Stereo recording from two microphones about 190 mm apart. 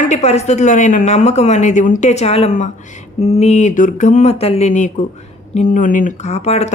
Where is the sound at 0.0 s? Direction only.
35° left (ahead or behind).